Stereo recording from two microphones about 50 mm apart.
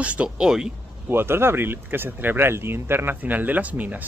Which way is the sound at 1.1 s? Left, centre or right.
Right.